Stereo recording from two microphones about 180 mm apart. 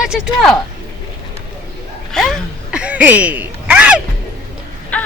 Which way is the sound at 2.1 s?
5° left (ahead or behind).